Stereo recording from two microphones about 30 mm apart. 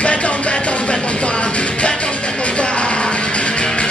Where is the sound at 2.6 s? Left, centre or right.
Left.